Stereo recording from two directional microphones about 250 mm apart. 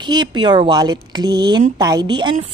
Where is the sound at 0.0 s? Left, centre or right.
Centre.